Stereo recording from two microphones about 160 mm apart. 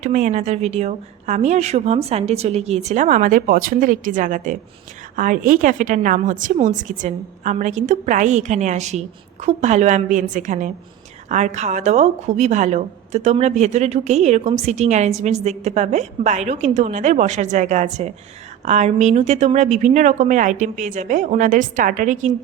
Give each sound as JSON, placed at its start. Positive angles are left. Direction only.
{"t": 0.0, "sound": "a woman's voice", "side_deg": -50}